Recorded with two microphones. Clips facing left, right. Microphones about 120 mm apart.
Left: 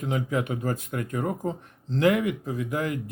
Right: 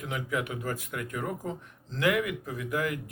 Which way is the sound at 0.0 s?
30° left (ahead or behind).